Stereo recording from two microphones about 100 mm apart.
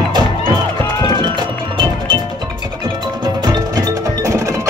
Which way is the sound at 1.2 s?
50° right (ahead or behind).